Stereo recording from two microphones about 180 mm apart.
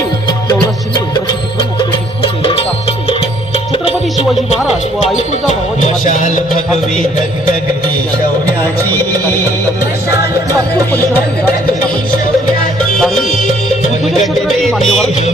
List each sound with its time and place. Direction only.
0.9 s music: 25° left (ahead or behind)
4.5 s speech: centre (ahead or behind)
5.1 s speech: 40° left (ahead or behind)
13.0 s music: centre (ahead or behind)